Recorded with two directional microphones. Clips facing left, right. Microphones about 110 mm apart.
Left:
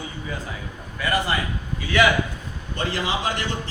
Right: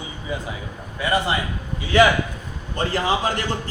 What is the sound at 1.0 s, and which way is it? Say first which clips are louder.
Speech: right 2 dB; 20° right (ahead or behind).